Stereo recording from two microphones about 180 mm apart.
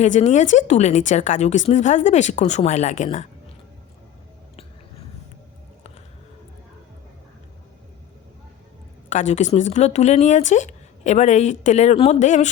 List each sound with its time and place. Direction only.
0.0 s speech: 40° left (ahead or behind)
9.0 s speech: 40° left (ahead or behind)